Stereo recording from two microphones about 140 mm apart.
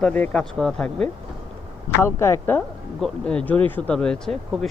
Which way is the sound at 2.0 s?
20° left (ahead or behind).